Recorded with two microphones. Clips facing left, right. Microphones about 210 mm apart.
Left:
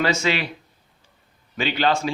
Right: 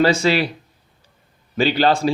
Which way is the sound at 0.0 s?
35° right (ahead or behind).